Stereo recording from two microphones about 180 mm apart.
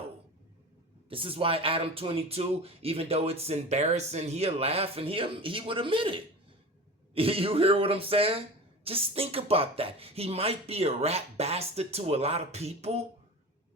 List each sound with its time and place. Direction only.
1.1 s speech: 30° right (ahead or behind)